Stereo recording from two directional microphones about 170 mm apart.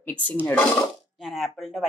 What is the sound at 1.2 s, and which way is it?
Speech, centre (ahead or behind).